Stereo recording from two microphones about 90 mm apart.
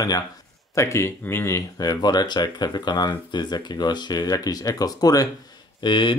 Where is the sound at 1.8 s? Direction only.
50° left (ahead or behind).